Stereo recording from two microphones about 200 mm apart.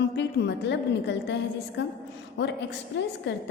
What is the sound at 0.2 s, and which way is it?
A woman's voice, 60° left (ahead or behind).